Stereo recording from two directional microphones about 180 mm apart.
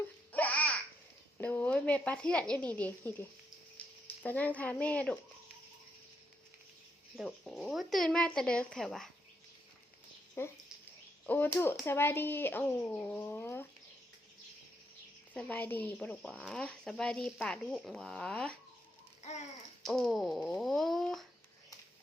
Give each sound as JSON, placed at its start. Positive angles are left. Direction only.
{"t": 0.3, "sound": "babbling", "side_deg": 10}
{"t": 1.4, "sound": "speech", "side_deg": 10}
{"t": 7.2, "sound": "speech", "side_deg": 0}
{"t": 10.4, "sound": "speech", "side_deg": 15}
{"t": 15.3, "sound": "speech", "side_deg": 10}
{"t": 19.2, "sound": "babbling", "side_deg": 40}
{"t": 19.8, "sound": "speech", "side_deg": 0}